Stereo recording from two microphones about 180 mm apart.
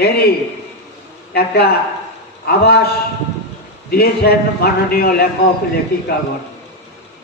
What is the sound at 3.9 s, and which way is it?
A man's voice, 60° left (ahead or behind).